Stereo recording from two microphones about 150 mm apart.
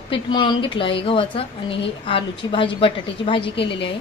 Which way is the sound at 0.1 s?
30° left (ahead or behind).